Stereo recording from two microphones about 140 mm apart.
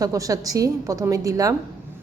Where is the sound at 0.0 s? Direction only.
25° right (ahead or behind).